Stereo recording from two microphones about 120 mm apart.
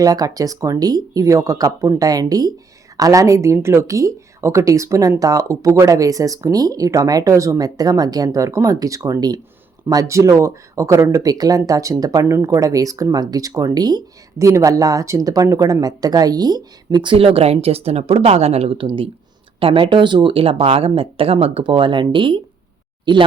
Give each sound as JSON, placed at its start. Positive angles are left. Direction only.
{"t": 0.0, "sound": "speech", "side_deg": -30}